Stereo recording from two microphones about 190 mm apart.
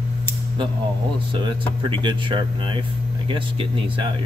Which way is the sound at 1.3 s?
25° right (ahead or behind).